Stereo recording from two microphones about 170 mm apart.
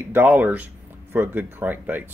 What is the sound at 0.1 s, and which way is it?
Speech, 10° right (ahead or behind).